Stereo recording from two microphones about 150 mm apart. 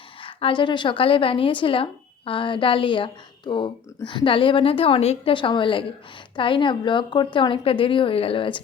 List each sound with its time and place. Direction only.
0.2 s a woman's voice: 35° left (ahead or behind)